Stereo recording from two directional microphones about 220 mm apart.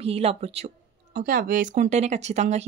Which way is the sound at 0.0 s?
25° right (ahead or behind).